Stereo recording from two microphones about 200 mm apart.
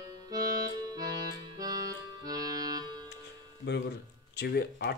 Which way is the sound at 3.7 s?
60° left (ahead or behind).